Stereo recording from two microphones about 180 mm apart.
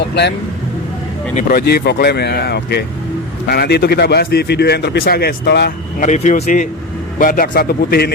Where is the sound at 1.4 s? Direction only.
55° left (ahead or behind).